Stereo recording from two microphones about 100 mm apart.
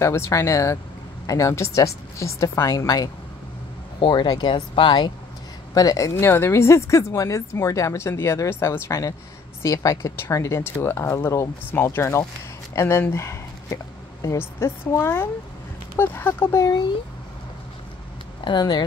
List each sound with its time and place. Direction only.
0.0 s a woman's voice: 25° left (ahead or behind)
4.0 s speech: 50° left (ahead or behind)
5.8 s a woman's voice: 35° left (ahead or behind)
6.1 s a woman's voice: 25° left (ahead or behind)
18.4 s speech: 50° left (ahead or behind)